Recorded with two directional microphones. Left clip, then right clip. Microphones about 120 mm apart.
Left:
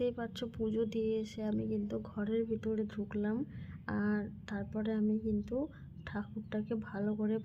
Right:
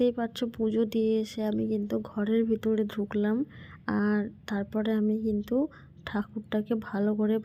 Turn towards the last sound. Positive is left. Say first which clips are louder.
# right 9 dB
turn(degrees=-45)  # may be behind; listen again after turning